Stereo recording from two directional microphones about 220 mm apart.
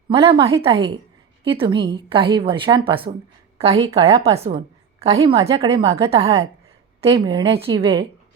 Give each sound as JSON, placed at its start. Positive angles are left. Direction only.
{"t": 0.1, "sound": "a woman's voice", "side_deg": -20}
{"t": 4.1, "sound": "a woman's voice", "side_deg": -25}